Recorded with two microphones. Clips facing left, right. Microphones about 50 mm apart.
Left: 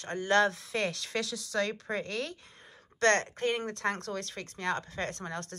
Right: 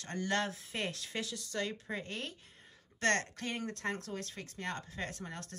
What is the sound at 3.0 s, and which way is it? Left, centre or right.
Speech, left.